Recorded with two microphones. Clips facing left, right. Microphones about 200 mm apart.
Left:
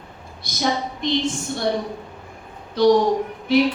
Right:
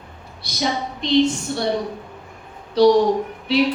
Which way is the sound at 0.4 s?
50° left (ahead or behind).